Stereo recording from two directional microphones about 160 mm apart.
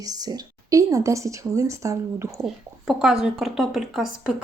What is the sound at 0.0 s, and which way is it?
A woman's voice, 25° right (ahead or behind).